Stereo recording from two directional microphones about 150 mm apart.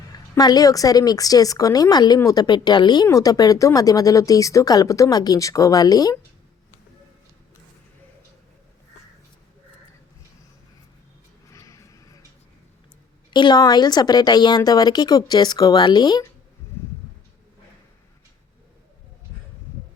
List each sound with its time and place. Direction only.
0.3 s a woman's voice: 25° left (ahead or behind)
11.5 s a sound: 20° left (ahead or behind)
13.3 s a woman's voice: 30° left (ahead or behind)